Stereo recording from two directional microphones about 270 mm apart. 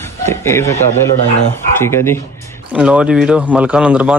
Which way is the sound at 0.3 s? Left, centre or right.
Centre.